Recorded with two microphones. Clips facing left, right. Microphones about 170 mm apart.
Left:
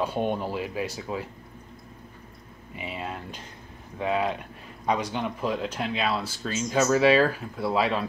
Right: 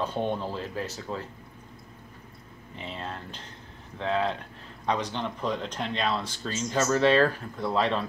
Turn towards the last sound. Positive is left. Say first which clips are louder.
# left 1 dB
turn(degrees=5)  # may be behind; listen again after turning